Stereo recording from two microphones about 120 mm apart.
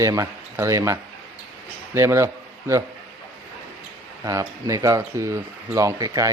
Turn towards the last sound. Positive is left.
turn(degrees=-30)  # may be behind; listen again after turning